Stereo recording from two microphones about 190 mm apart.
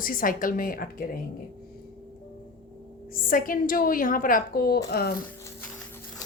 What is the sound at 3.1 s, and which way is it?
A woman's voice, 45° left (ahead or behind).